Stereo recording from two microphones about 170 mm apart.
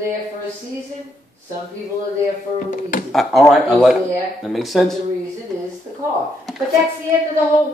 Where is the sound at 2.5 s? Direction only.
50° left (ahead or behind).